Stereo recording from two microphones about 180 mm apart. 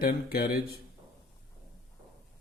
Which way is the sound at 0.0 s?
60° left (ahead or behind).